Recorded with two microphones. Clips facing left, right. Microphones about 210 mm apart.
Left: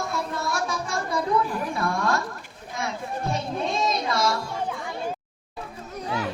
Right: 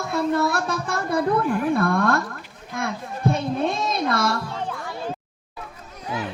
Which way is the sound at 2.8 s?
55° right (ahead or behind).